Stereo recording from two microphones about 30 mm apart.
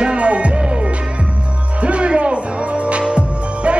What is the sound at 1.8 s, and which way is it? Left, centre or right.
Music, right.